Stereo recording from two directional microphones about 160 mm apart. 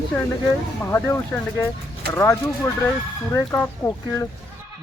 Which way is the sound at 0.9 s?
15° left (ahead or behind).